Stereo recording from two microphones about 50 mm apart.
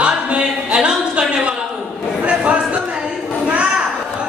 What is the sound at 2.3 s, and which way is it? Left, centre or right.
Chatter, right.